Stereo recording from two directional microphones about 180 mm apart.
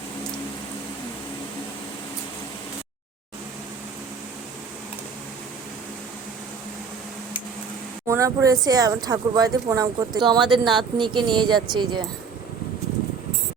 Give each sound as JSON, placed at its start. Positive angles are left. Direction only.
{"t": 8.0, "sound": "speech", "side_deg": -15}
{"t": 10.4, "sound": "speech", "side_deg": 0}
{"t": 10.9, "sound": "speech", "side_deg": -25}